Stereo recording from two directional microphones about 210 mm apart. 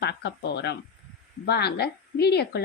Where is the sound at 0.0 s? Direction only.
55° left (ahead or behind).